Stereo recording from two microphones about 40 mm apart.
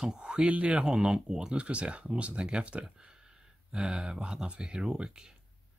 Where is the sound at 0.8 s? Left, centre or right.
Centre.